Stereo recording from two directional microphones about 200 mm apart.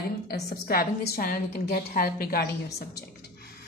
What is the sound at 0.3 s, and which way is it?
A woman's voice, 50° left (ahead or behind).